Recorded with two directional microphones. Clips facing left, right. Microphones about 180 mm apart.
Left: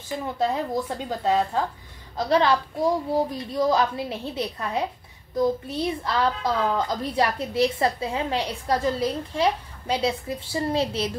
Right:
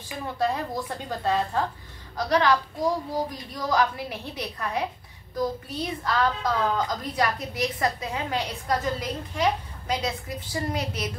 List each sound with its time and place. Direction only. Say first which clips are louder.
0.4 s a woman's voice: left 2 dB; 20° left (ahead or behind)